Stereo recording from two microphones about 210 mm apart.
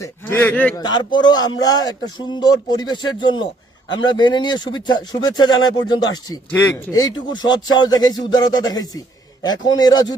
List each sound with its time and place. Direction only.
0.0 s speech: 10° left (ahead or behind)
0.8 s speech: 20° left (ahead or behind)